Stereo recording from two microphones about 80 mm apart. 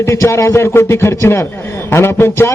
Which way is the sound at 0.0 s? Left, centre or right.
Left.